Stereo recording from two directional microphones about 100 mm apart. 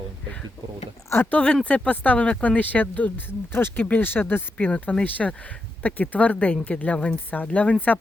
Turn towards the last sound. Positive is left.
turn(degrees=15)  # may be behind; listen again after turning